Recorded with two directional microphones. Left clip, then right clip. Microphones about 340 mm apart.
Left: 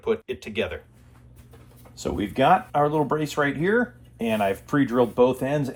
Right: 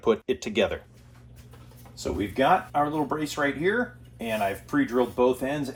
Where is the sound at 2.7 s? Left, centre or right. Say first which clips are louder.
Left 4 dB; left.